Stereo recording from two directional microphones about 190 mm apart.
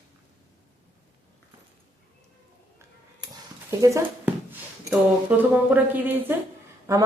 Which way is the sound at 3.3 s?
15° right (ahead or behind).